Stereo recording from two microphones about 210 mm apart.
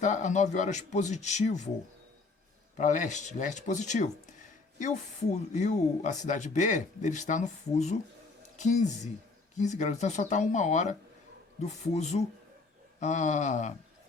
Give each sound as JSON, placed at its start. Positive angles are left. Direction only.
{"t": 0.0, "sound": "speech", "side_deg": 35}
{"t": 2.7, "sound": "speech", "side_deg": 35}